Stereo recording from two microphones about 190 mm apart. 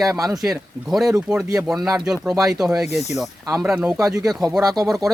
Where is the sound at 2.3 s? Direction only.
20° right (ahead or behind).